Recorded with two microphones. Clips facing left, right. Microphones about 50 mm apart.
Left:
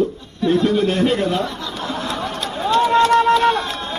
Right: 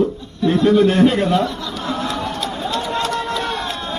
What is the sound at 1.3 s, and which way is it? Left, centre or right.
Speech, left.